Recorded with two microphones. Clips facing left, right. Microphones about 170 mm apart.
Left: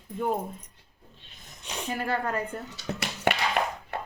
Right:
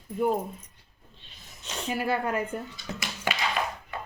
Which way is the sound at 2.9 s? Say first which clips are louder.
Left 4 dB; 60° left (ahead or behind).